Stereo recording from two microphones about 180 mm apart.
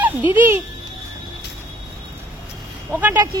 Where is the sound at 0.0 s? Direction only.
10° right (ahead or behind).